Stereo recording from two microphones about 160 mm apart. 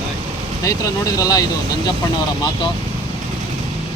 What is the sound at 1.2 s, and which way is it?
Speech, 25° left (ahead or behind).